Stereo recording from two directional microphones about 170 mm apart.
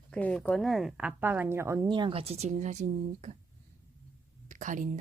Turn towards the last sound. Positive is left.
turn(degrees=-50)  # may be behind; listen again after turning